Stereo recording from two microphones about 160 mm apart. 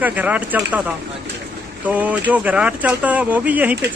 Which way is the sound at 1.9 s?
10° right (ahead or behind).